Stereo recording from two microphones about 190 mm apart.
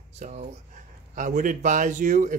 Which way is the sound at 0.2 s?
40° right (ahead or behind).